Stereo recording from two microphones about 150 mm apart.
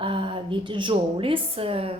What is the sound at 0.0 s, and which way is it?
A woman's voice, 35° right (ahead or behind).